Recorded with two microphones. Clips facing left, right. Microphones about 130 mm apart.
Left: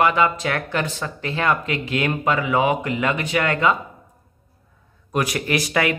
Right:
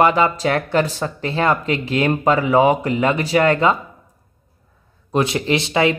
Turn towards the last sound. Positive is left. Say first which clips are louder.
# right 4 dB
turn(degrees=-25)  # may be behind; listen again after turning